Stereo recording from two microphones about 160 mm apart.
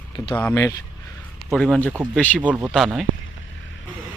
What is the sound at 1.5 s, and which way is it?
Speech, centre (ahead or behind).